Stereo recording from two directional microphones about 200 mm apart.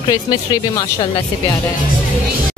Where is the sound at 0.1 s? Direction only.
20° left (ahead or behind).